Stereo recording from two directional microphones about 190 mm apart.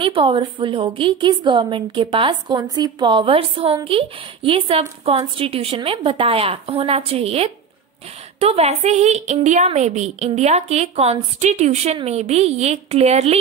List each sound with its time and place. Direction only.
0.0 s a woman's voice: 25° right (ahead or behind)